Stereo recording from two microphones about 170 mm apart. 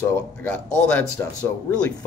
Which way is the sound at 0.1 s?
10° left (ahead or behind).